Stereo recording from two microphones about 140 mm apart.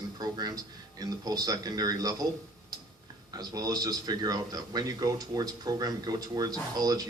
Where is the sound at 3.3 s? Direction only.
30° right (ahead or behind).